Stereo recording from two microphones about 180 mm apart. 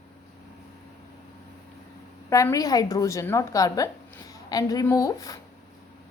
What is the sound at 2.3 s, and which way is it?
A woman's voice, 15° left (ahead or behind).